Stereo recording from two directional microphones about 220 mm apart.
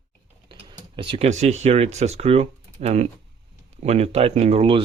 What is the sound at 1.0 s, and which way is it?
Speech, 25° right (ahead or behind).